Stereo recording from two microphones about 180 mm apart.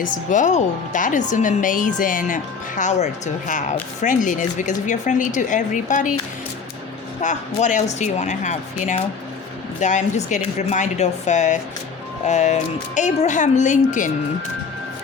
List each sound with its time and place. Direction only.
0.0 s speech: 45° left (ahead or behind)
7.2 s speech: 45° left (ahead or behind)